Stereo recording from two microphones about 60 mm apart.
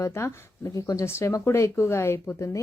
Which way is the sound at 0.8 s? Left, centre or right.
Left.